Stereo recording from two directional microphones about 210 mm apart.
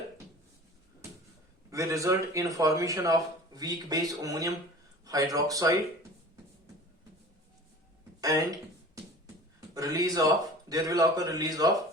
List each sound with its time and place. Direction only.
1.7 s speech: 15° right (ahead or behind)
8.2 s speech: 15° right (ahead or behind)